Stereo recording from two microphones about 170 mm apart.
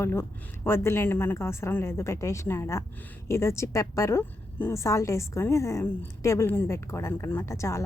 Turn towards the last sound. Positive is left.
turn(degrees=15)  # may be behind; listen again after turning